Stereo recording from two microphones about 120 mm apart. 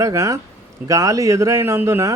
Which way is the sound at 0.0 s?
25° right (ahead or behind).